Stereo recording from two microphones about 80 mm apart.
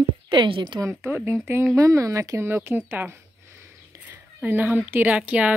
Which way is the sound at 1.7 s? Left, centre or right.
Right.